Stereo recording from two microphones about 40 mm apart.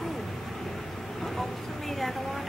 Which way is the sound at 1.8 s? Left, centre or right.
Centre.